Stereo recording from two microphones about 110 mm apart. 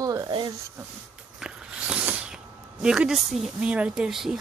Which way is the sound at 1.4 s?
10° right (ahead or behind).